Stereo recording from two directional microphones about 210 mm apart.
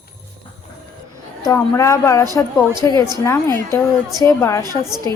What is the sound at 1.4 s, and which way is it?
A woman's voice, 15° left (ahead or behind).